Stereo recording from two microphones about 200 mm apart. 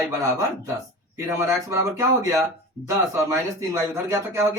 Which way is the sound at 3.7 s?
15° right (ahead or behind).